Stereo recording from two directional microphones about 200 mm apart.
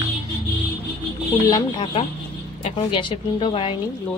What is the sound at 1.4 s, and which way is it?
Speech, 20° left (ahead or behind).